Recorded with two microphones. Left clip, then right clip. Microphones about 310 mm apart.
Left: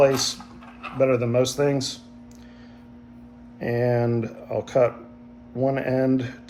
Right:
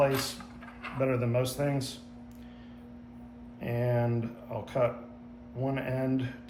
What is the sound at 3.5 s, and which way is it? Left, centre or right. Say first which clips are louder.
Speech: left 8 dB; centre.